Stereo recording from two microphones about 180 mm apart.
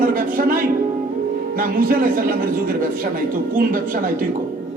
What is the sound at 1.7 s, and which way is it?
Speech, 50° right (ahead or behind).